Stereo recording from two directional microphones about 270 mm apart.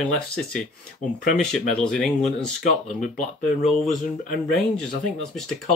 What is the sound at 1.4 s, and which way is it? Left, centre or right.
Speech, centre.